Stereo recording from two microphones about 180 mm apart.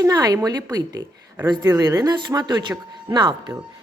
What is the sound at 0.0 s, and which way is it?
A child's voice, 20° right (ahead or behind).